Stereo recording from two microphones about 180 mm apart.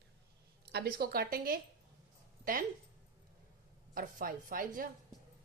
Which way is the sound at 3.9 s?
50° right (ahead or behind).